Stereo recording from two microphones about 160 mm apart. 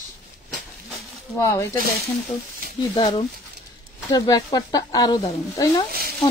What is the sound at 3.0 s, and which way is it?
Speech, 35° left (ahead or behind).